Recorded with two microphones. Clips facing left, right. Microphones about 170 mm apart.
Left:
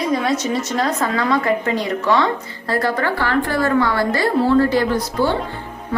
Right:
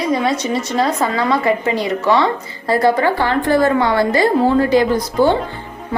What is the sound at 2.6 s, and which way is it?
A woman's voice, 15° right (ahead or behind).